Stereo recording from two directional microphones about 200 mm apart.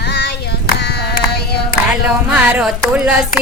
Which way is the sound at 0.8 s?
55° left (ahead or behind).